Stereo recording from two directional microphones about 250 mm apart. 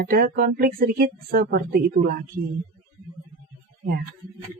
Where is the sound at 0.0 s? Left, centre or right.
Right.